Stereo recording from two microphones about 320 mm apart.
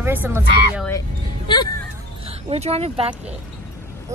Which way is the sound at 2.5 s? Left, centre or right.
Centre.